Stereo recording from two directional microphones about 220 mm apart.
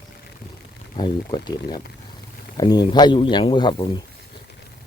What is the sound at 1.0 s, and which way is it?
Speech, 20° left (ahead or behind).